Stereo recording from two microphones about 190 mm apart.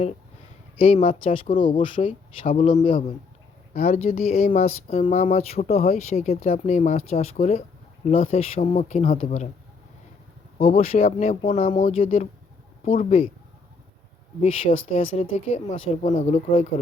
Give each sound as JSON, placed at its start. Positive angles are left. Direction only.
{"t": 0.8, "sound": "speech", "side_deg": 35}
{"t": 5.4, "sound": "speech", "side_deg": 35}
{"t": 10.8, "sound": "speech", "side_deg": 35}
{"t": 14.4, "sound": "speech", "side_deg": 30}